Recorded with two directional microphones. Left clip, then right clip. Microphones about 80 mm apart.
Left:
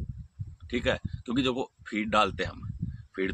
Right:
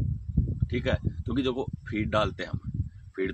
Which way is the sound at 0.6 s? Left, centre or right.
Left.